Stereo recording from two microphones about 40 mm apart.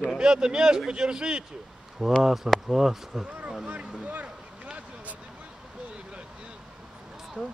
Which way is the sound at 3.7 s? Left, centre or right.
Right.